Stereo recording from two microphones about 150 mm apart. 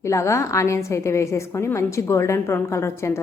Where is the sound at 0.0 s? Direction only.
20° left (ahead or behind).